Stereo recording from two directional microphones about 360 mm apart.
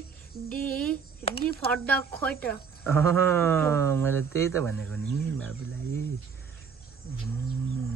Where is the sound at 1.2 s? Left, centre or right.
Centre.